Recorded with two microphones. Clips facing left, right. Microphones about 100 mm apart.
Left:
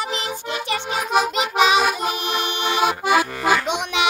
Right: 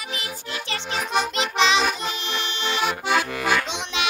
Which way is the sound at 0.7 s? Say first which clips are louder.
Left 4 dB; 5° left (ahead or behind).